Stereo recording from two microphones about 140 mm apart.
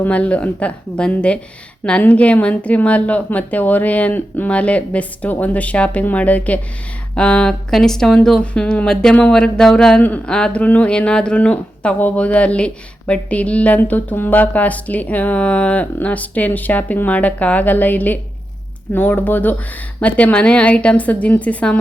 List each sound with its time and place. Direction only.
0.0 s speech: 10° left (ahead or behind)